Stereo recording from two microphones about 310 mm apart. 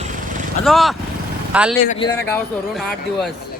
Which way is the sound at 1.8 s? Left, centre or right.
Left.